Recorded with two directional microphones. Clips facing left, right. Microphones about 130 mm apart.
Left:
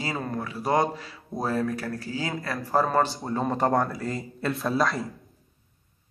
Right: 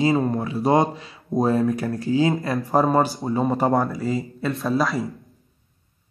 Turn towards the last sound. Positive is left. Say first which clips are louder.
# right 3 dB
turn(degrees=0)  # may be behind; listen again after turning